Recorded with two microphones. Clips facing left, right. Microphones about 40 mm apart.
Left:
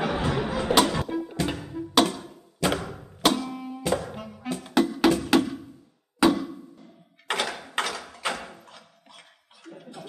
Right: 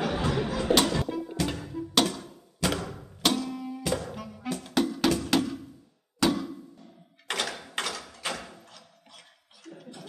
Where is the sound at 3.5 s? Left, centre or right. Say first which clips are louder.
Left 2 dB; left.